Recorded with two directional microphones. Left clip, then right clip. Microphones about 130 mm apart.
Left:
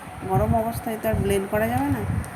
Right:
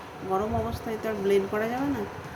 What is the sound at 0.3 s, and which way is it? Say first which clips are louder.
A woman's voice: left 6 dB; 25° left (ahead or behind).